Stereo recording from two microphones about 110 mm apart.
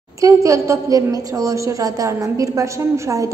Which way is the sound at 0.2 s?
30° right (ahead or behind).